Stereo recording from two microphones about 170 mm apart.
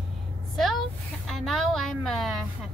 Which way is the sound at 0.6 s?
Centre (ahead or behind).